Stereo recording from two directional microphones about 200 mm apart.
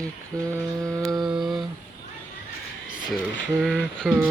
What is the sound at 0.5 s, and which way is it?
Mantra, 15° right (ahead or behind).